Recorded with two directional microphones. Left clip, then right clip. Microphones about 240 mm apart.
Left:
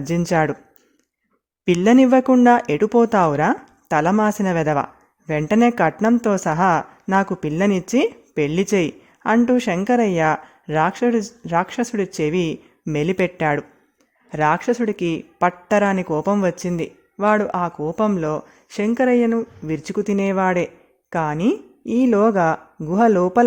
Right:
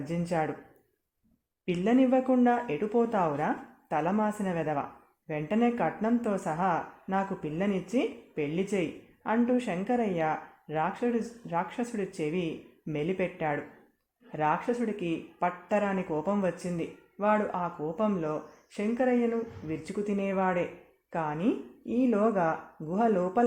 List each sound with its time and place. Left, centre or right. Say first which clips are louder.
0.0 s speech: left 11 dB; left
1.6 s speech: left 12 dB; left